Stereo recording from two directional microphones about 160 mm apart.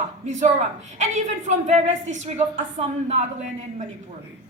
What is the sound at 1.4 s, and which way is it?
A woman's voice, 45° right (ahead or behind).